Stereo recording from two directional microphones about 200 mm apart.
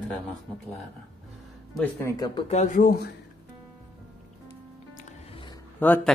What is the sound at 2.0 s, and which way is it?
Speech, 20° left (ahead or behind).